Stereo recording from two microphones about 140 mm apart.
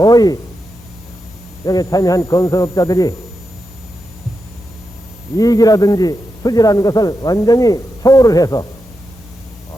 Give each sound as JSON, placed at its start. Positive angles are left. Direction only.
{"t": 0.0, "sound": "speech", "side_deg": 25}
{"t": 1.6, "sound": "a man's voice", "side_deg": 25}
{"t": 5.4, "sound": "a man's voice", "side_deg": 25}